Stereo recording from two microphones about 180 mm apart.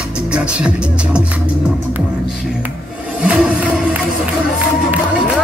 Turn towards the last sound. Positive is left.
turn(degrees=-5)  # may be behind; listen again after turning